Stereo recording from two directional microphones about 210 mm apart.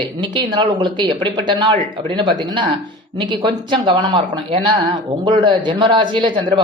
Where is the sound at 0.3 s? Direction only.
20° right (ahead or behind).